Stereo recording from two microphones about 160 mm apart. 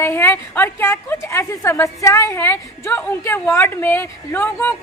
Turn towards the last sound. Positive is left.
turn(degrees=10)  # may be behind; listen again after turning